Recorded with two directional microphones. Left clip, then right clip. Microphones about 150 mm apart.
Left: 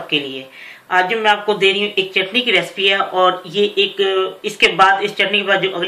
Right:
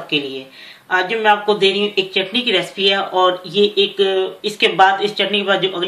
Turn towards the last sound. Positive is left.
turn(degrees=-45)  # may be behind; listen again after turning